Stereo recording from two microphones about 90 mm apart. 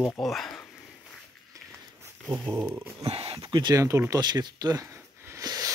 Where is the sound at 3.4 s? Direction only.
55° right (ahead or behind).